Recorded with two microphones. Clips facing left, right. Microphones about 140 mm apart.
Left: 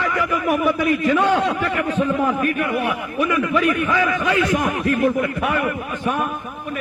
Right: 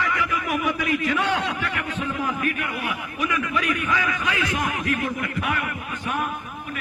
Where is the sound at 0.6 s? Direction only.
45° left (ahead or behind); by 4.3 s 60° left (ahead or behind).